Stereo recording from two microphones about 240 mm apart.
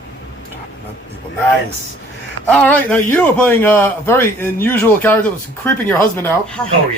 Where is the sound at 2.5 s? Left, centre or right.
Centre.